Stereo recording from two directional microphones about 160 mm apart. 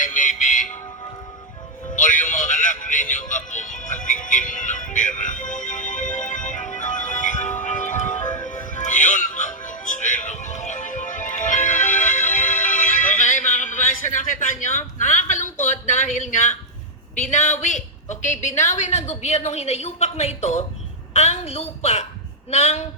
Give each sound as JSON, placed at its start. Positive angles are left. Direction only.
{"t": 0.0, "sound": "music", "side_deg": 55}
{"t": 2.0, "sound": "music", "side_deg": 55}
{"t": 17.3, "sound": "a woman's voice", "side_deg": 50}